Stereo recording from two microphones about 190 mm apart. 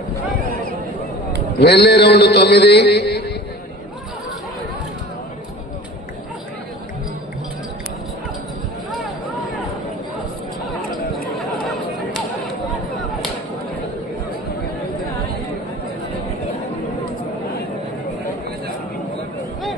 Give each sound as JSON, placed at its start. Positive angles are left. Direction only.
{"t": 1.6, "sound": "mantra", "side_deg": 60}